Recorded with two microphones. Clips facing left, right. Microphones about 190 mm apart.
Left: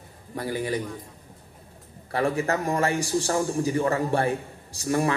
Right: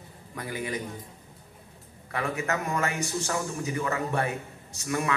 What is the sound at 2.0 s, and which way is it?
A man's voice, 30° left (ahead or behind).